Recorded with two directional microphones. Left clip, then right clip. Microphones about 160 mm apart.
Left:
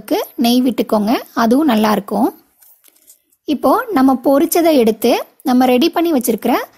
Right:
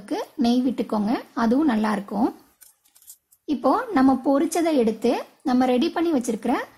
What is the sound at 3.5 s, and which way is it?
Speech, 40° left (ahead or behind).